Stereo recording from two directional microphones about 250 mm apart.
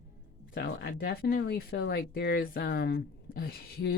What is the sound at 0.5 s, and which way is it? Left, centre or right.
Speech, left.